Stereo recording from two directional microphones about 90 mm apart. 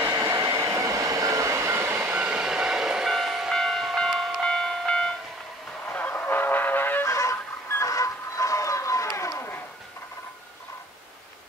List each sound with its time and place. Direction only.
0.0 s train: 30° right (ahead or behind)
2.0 s train: 15° right (ahead or behind); by 5.1 s 10° left (ahead or behind)
5.9 s goose: 20° left (ahead or behind)
7.1 s a sound: 35° left (ahead or behind)